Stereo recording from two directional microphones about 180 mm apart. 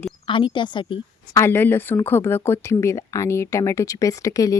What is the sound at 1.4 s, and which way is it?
Speech, 10° left (ahead or behind).